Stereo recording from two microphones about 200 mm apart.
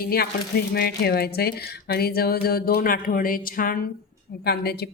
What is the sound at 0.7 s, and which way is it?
A woman's voice, 50° left (ahead or behind).